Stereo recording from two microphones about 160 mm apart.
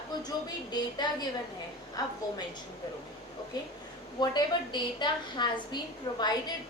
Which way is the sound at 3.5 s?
25° left (ahead or behind).